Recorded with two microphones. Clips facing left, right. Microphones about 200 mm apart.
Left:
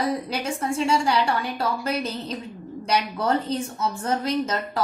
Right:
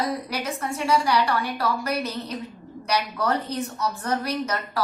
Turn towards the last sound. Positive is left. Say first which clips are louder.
# left 2 dB
turn(degrees=25)  # may be behind; listen again after turning